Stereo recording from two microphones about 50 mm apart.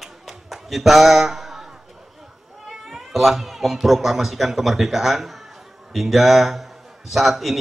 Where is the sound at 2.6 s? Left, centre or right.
Centre.